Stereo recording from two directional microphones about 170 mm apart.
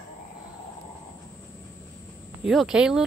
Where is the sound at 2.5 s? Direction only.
Centre (ahead or behind).